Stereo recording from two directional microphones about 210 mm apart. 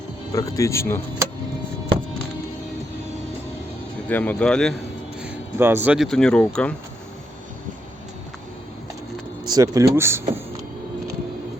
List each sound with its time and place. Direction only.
0.3 s speech: 15° left (ahead or behind)
4.1 s speech: 5° left (ahead or behind)
5.2 s speech: 10° right (ahead or behind); by 6.7 s 5° left (ahead or behind)
9.4 s speech: 20° right (ahead or behind)